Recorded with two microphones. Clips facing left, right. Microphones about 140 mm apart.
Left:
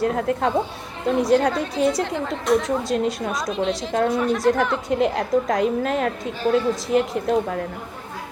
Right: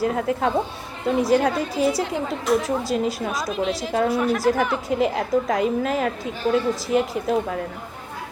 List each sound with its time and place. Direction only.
0.0 s a woman's voice: centre (ahead or behind)